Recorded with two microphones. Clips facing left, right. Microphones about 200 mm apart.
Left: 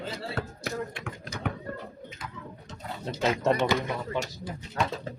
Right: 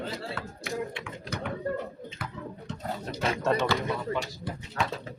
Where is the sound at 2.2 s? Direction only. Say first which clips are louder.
Right 4 dB; 65° right (ahead or behind).